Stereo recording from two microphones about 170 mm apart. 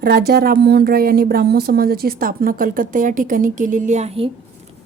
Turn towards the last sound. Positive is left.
turn(degrees=-40)  # may be behind; listen again after turning